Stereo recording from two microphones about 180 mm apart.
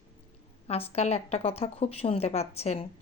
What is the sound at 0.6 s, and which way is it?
A woman's voice, 35° left (ahead or behind).